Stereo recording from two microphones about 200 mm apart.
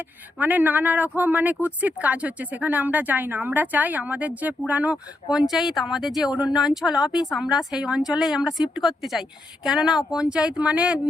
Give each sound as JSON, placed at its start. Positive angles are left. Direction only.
{"t": 0.3, "sound": "a woman's voice", "side_deg": -10}